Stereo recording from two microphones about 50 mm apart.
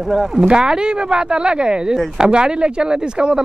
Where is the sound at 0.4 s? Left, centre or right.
Centre.